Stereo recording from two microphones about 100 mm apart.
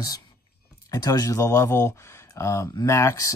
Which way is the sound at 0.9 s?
40° left (ahead or behind).